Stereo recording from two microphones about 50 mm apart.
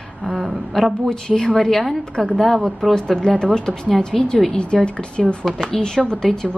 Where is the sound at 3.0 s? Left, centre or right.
Centre.